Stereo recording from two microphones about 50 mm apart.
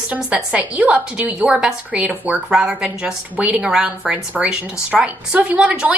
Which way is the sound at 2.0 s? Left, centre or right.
Right.